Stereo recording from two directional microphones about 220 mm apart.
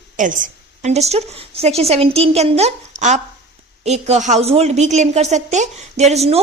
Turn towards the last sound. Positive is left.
turn(degrees=-30)  # may be behind; listen again after turning